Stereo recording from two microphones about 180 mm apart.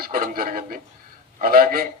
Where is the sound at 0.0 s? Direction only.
50° right (ahead or behind).